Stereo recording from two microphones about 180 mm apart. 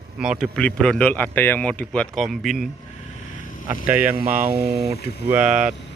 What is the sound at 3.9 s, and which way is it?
Speech, 10° right (ahead or behind).